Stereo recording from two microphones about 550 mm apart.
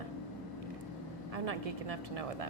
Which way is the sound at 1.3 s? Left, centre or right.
Right.